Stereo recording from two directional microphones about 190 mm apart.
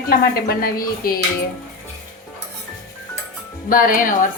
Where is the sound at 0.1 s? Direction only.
50° left (ahead or behind).